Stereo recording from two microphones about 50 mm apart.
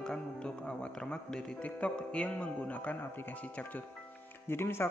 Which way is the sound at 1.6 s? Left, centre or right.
Left.